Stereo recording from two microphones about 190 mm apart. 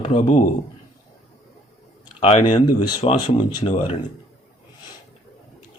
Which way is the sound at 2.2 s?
35° left (ahead or behind).